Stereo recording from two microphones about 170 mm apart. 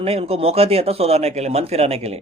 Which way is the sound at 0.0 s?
35° right (ahead or behind).